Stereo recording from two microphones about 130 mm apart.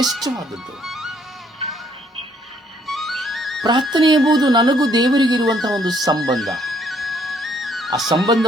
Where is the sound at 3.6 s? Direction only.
35° right (ahead or behind).